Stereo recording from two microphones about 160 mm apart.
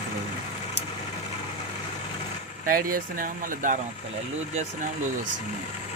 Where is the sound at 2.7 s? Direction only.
60° right (ahead or behind).